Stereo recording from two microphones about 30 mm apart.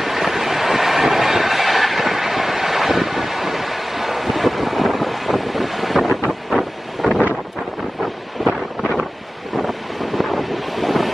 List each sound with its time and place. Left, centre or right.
0.0 s train: centre
8.4 s wind noise: centre
9.6 s wind noise: centre